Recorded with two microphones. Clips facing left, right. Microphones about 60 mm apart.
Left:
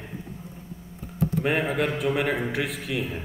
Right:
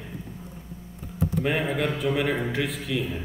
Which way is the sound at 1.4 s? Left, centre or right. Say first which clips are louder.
Left 1 dB; left.